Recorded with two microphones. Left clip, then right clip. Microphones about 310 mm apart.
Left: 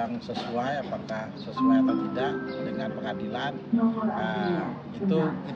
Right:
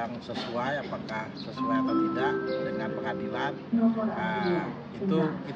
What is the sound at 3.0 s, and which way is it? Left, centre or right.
Speech, centre.